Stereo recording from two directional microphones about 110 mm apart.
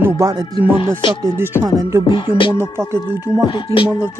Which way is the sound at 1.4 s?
20° right (ahead or behind).